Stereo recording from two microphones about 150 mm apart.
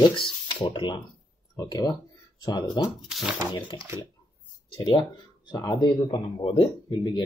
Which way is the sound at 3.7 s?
30° left (ahead or behind).